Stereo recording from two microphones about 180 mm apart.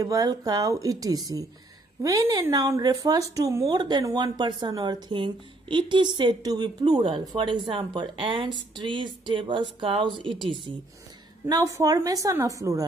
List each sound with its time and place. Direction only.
0.0 s a woman's voice: 20° right (ahead or behind)